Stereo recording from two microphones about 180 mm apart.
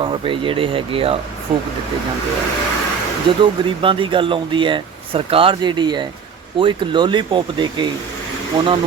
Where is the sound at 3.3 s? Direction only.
30° right (ahead or behind).